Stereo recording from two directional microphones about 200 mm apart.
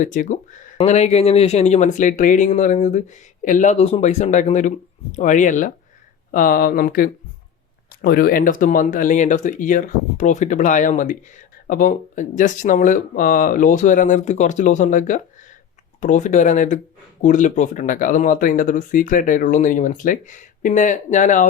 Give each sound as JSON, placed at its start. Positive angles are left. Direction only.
{"t": 0.0, "sound": "speech", "side_deg": 40}